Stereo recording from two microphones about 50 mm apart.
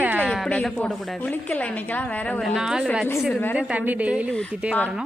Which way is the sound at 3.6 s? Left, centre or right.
Right.